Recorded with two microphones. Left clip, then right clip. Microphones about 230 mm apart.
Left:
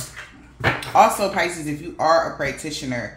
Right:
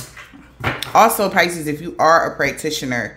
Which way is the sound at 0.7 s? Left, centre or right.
Right.